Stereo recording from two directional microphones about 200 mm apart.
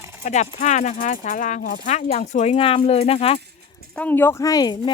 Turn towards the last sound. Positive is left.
turn(degrees=20)  # may be behind; listen again after turning